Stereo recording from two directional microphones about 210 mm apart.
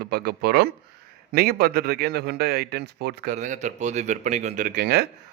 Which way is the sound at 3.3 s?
35° right (ahead or behind).